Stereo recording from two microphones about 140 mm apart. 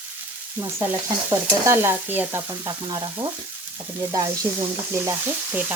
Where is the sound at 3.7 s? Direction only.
20° right (ahead or behind).